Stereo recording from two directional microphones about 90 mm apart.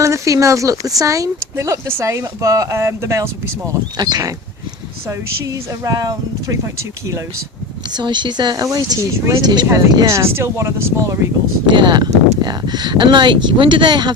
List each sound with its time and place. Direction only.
0.0 s speech: 35° right (ahead or behind)
3.9 s speech: 50° right (ahead or behind)
7.9 s speech: 55° right (ahead or behind)
9.0 s speech: 35° right (ahead or behind)
9.4 s speech: 50° right (ahead or behind)
10.1 s speech: 30° right (ahead or behind)
11.6 s speech: 60° right (ahead or behind)